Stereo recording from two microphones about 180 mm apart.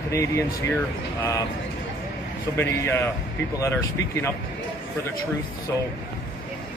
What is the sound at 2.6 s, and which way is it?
Speech, 15° left (ahead or behind).